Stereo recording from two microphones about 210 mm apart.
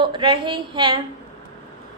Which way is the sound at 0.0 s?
25° right (ahead or behind).